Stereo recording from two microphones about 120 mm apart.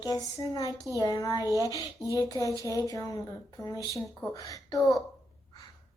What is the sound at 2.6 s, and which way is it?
Speech, 30° left (ahead or behind).